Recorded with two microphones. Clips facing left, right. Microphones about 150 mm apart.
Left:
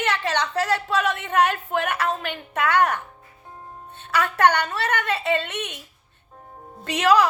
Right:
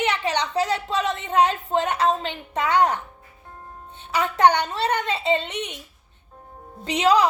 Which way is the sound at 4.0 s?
15° right (ahead or behind).